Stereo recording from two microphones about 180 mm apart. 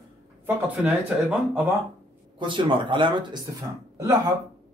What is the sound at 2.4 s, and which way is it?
Speech, 25° right (ahead or behind).